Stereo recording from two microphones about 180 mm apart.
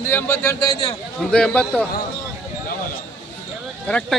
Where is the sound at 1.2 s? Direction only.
5° left (ahead or behind).